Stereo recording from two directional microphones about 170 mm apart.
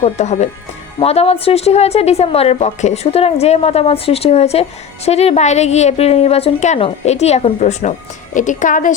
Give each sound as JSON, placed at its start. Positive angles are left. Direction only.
{"t": 0.0, "sound": "a woman's voice", "side_deg": 40}